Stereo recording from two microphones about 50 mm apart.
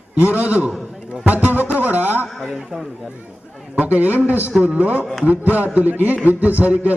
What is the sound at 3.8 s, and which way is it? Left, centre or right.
A man's voice, right.